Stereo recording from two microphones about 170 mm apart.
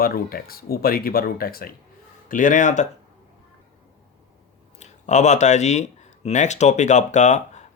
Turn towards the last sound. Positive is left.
turn(degrees=45)  # may be behind; listen again after turning